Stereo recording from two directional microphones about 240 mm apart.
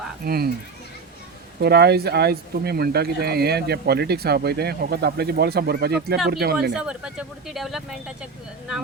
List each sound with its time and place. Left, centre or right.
0.3 s speech: right
1.6 s speech: right
6.7 s speech: centre